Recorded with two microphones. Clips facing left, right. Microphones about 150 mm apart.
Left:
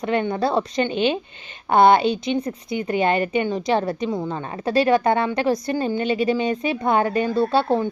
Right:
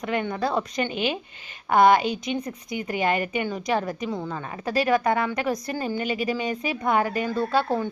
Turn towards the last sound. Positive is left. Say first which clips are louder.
# left 4 dB
turn(degrees=25)  # may be behind; listen again after turning